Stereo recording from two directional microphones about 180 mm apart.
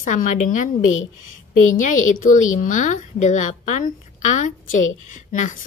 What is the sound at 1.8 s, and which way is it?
A woman's voice, 45° left (ahead or behind).